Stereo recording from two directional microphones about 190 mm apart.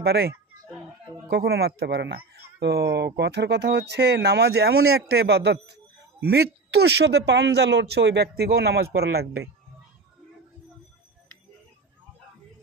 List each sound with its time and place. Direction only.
0.0 s speech: 60° right (ahead or behind)
1.3 s speech: 60° right (ahead or behind)